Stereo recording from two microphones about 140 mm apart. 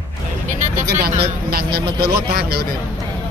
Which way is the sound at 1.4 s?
90° right.